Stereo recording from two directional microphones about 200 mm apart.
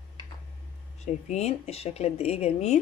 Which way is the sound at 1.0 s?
35° left (ahead or behind).